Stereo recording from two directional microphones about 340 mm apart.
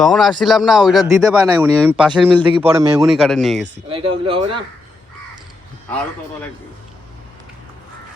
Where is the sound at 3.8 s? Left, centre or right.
Centre.